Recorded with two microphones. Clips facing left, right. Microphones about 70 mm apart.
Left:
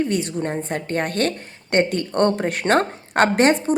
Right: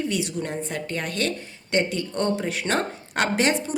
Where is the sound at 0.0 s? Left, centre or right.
Left.